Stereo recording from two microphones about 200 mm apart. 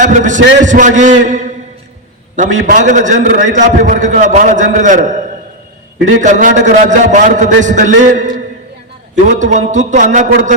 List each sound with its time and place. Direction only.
0.0 s a man's voice: 40° right (ahead or behind)